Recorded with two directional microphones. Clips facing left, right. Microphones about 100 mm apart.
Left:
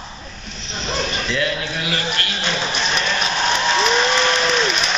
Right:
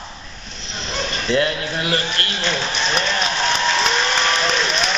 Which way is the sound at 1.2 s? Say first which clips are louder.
Right 3 dB; 35° right (ahead or behind).